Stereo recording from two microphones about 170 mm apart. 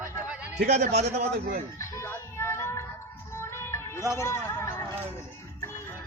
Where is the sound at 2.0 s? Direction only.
15° left (ahead or behind).